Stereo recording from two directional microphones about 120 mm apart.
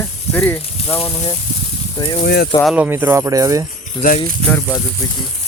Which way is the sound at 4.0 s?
30° left (ahead or behind).